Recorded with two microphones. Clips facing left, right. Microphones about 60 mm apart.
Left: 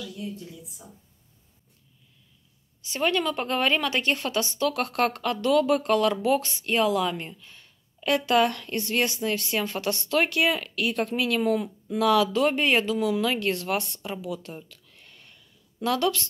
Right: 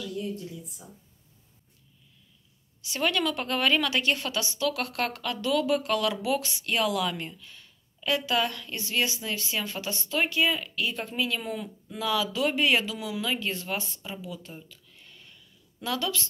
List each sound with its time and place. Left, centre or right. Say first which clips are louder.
2.8 s a woman's voice: left 2 dB; left